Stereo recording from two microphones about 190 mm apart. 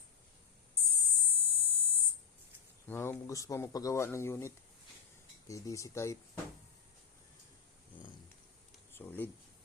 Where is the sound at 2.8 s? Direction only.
10° left (ahead or behind).